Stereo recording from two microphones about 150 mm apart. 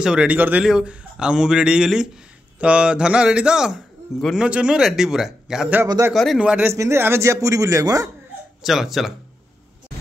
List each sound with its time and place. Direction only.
0.0 s a man's voice: 5° right (ahead or behind)
5.9 s a man's voice: 20° right (ahead or behind)
6.1 s speech: centre (ahead or behind); by 8.1 s 20° right (ahead or behind)
8.6 s a man's voice: centre (ahead or behind)